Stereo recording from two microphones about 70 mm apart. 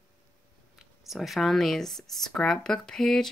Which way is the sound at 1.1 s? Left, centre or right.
Centre.